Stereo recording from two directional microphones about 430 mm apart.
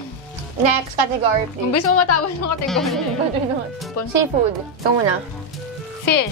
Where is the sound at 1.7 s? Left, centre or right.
Left.